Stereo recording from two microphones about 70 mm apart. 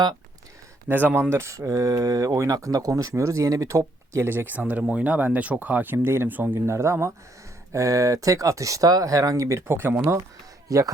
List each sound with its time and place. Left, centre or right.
0.9 s speech: right
4.3 s speech: right
6.7 s speech: right
10.7 s speech: right